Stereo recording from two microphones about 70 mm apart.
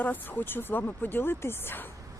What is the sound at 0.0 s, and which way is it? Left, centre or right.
Speech, left.